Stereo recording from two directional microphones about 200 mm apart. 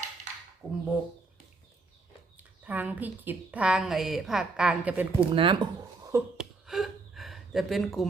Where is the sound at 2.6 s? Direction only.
10° right (ahead or behind).